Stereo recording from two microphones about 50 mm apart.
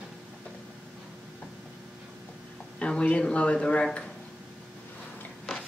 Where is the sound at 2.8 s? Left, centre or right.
Left.